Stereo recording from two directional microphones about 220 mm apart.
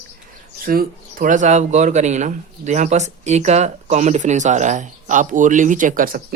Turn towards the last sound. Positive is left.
turn(degrees=-40)  # may be behind; listen again after turning